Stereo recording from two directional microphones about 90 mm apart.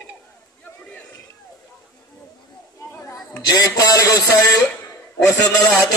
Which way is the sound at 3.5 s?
45° left (ahead or behind).